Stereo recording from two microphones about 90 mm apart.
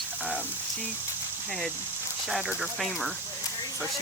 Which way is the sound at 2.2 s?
Centre (ahead or behind).